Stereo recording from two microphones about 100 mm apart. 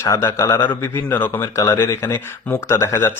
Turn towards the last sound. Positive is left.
turn(degrees=25)  # may be behind; listen again after turning